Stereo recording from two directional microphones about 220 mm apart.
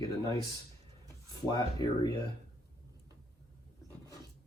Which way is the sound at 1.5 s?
20° left (ahead or behind).